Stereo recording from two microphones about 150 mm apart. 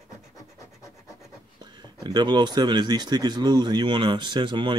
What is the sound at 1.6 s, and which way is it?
Speech, 30° right (ahead or behind).